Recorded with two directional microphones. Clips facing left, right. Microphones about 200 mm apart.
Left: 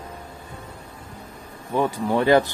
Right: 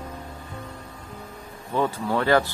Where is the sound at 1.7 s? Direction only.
15° left (ahead or behind).